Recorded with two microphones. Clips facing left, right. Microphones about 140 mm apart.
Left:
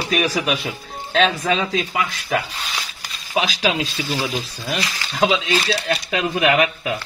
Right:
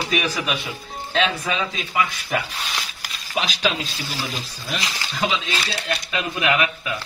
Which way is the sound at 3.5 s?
90° left.